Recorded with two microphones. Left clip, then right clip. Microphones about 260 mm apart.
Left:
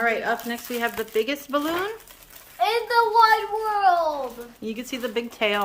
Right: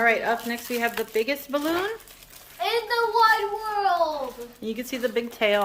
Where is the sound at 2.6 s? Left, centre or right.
Centre.